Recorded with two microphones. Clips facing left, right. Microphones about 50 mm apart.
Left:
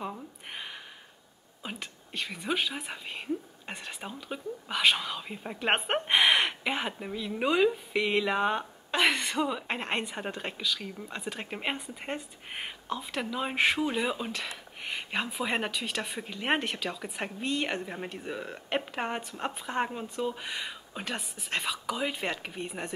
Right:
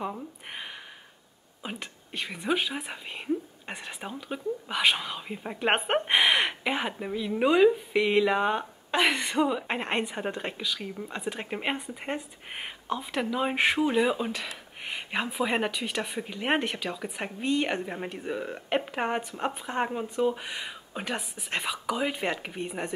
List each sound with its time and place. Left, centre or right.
0.0 s a sound: centre
1.6 s whispering: centre
2.4 s speech: centre